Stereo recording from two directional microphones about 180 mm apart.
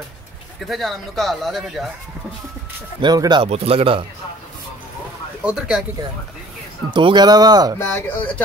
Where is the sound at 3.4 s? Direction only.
35° right (ahead or behind).